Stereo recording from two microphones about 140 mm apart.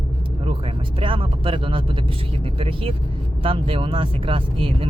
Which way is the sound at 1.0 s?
40° right (ahead or behind).